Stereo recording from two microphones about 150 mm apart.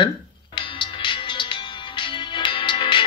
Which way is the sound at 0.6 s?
35° left (ahead or behind).